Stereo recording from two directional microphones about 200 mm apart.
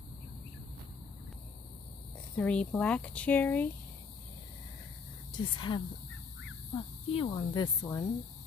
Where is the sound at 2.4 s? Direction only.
5° left (ahead or behind).